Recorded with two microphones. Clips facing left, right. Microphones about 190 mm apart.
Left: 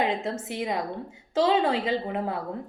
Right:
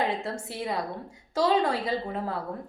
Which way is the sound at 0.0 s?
20° left (ahead or behind).